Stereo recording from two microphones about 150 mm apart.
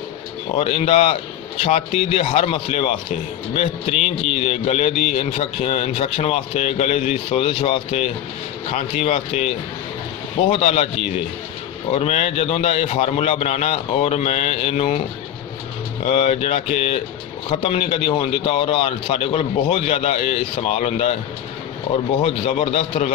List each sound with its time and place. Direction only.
0.6 s a man's voice: 40° left (ahead or behind)
4.4 s a man's voice: 40° left (ahead or behind)
11.9 s a man's voice: 45° left (ahead or behind)
16.1 s a man's voice: 45° left (ahead or behind)
22.2 s a man's voice: 40° left (ahead or behind)